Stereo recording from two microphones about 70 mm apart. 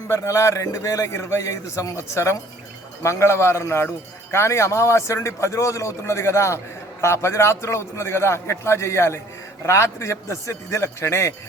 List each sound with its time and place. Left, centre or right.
0.1 s a man's voice: left